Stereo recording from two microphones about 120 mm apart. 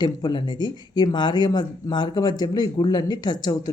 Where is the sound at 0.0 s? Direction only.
40° left (ahead or behind).